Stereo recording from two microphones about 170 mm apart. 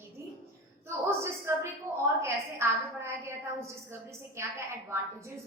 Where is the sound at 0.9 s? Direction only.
15° right (ahead or behind).